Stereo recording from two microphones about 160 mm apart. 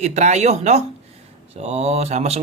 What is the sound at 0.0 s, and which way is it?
Speech, 45° right (ahead or behind).